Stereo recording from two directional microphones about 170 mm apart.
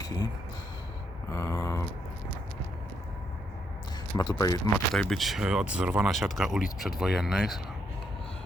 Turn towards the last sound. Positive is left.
turn(degrees=0)  # may be behind; listen again after turning